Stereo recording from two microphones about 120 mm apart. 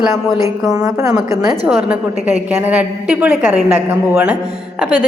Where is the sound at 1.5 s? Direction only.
5° right (ahead or behind).